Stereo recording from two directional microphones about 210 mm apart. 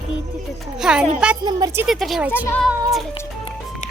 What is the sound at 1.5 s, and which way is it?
Speech, 20° right (ahead or behind).